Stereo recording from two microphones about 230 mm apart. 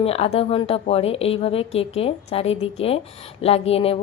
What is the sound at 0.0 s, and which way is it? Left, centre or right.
A woman's voice, left.